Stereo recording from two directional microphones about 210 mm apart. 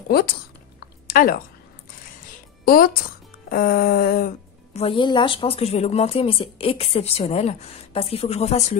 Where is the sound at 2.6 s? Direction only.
45° left (ahead or behind).